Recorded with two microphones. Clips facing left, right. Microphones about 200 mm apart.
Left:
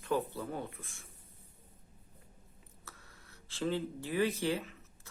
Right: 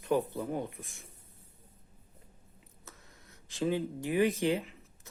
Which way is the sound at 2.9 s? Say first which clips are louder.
Right 1 dB; 20° right (ahead or behind).